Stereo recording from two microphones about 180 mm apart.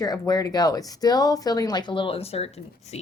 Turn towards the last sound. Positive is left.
turn(degrees=35)  # may be behind; listen again after turning